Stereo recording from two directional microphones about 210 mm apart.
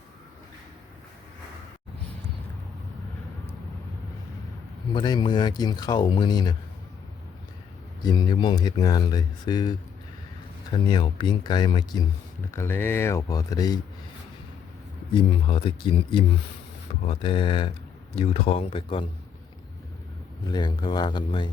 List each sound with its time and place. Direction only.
4.9 s speech: 20° left (ahead or behind)
8.0 s speech: 20° left (ahead or behind)
15.1 s speech: 25° left (ahead or behind)
20.5 s speech: 20° left (ahead or behind)